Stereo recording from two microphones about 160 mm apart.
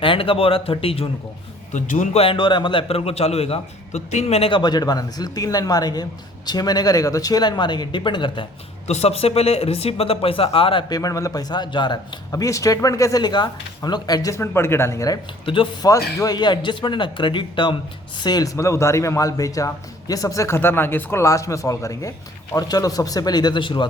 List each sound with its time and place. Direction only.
0.0 s speech: 35° left (ahead or behind)
1.7 s a man's voice: 50° left (ahead or behind)
2.2 s speech: 30° left (ahead or behind)
8.9 s speech: 40° left (ahead or behind)